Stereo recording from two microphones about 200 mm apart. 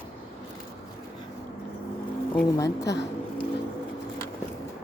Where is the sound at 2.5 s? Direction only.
15° left (ahead or behind).